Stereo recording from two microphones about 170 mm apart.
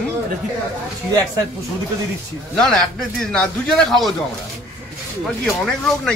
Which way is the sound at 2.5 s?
5° left (ahead or behind).